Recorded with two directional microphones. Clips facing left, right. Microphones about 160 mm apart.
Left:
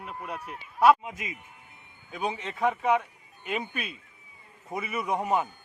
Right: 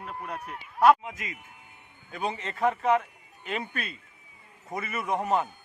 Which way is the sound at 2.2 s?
Centre (ahead or behind).